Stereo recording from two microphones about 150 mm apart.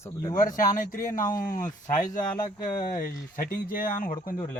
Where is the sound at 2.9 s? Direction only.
75° left (ahead or behind).